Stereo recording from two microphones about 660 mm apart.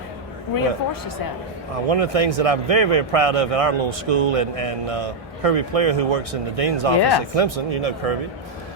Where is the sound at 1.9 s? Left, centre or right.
Right.